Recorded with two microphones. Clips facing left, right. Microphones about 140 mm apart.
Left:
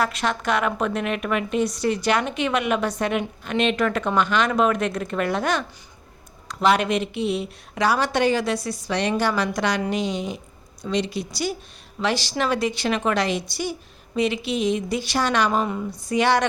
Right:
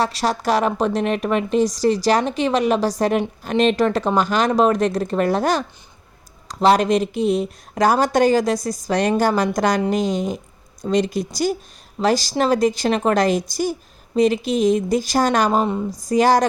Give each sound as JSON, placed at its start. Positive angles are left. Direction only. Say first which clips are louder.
{"t": 0.0, "sound": "a woman's voice", "louder": "right 3 dB", "side_deg": -35}
{"t": 15.6, "sound": "a woman's voice", "louder": "right 5 dB", "side_deg": -25}
{"t": 16.0, "sound": "a woman's voice", "louder": "right 4 dB", "side_deg": -40}